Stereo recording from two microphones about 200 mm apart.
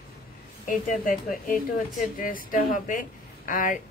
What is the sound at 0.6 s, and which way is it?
Speech, 45° left (ahead or behind).